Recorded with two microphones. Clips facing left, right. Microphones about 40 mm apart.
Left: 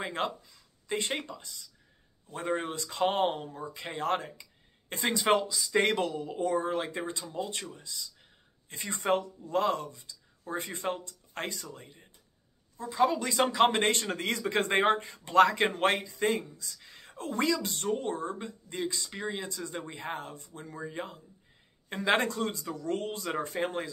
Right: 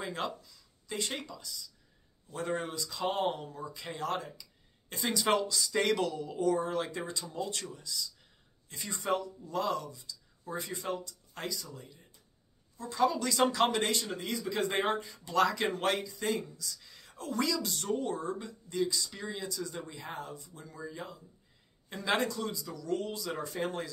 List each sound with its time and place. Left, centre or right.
0.0 s speech: left
2.4 s speech: left
2.7 s speech: left
5.5 s speech: centre
5.8 s speech: left
12.9 s speech: left
13.7 s speech: left
23.5 s speech: left